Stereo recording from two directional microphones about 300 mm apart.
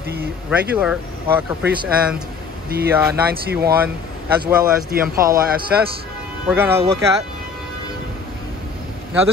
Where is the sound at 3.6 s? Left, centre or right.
Right.